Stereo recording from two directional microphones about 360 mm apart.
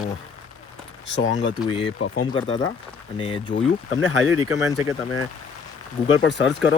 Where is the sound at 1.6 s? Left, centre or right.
Centre.